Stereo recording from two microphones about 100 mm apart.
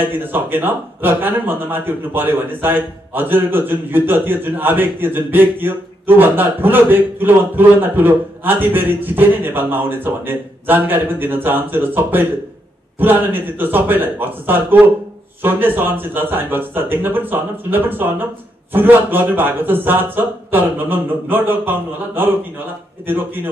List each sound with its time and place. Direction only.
0.0 s speech: 20° right (ahead or behind)